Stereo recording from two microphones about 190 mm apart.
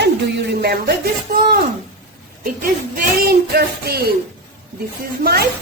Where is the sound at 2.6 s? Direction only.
50° right (ahead or behind).